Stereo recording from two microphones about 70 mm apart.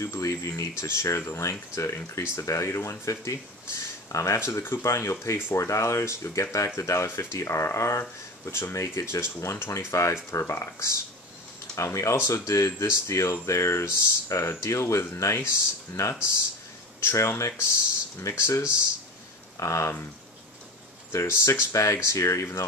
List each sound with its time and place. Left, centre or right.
0.0 s speech: left
21.1 s speech: left